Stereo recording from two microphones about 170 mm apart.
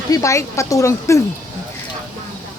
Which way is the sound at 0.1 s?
20° left (ahead or behind).